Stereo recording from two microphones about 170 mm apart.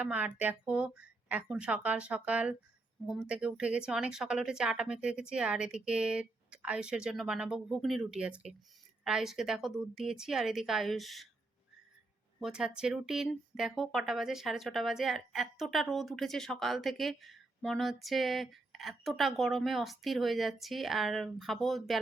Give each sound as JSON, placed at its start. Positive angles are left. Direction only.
{"t": 0.0, "sound": "speech", "side_deg": -5}
{"t": 12.4, "sound": "speech", "side_deg": -5}